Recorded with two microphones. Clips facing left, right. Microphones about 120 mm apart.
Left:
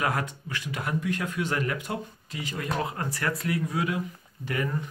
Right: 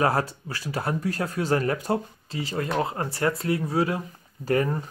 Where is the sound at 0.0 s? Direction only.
35° right (ahead or behind).